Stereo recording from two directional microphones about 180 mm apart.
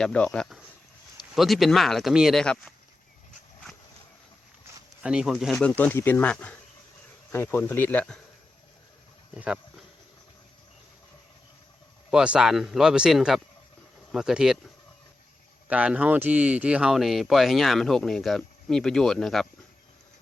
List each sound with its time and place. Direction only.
0.0 s speech: 5° left (ahead or behind)
5.0 s speech: 5° right (ahead or behind)
9.3 s speech: 5° right (ahead or behind)
12.1 s speech: 5° right (ahead or behind)
15.6 s speech: 5° right (ahead or behind)